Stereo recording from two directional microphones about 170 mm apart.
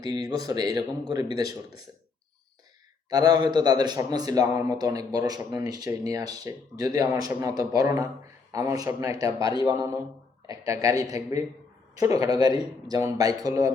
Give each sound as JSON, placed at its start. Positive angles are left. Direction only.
{"t": 0.0, "sound": "a man's voice", "side_deg": -25}
{"t": 3.1, "sound": "a man's voice", "side_deg": -25}
{"t": 10.4, "sound": "a man's voice", "side_deg": -20}